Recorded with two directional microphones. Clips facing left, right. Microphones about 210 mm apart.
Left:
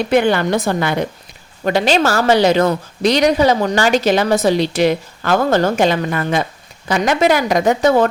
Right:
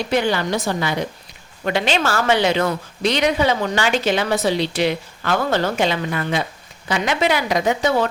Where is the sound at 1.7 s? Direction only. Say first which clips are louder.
Left 5 dB; 40° left (ahead or behind).